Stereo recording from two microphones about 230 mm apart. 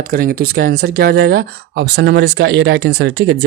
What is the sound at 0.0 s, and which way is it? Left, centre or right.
Speech, right.